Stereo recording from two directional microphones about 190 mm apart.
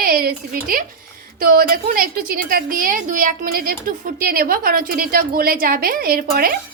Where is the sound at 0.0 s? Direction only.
50° right (ahead or behind).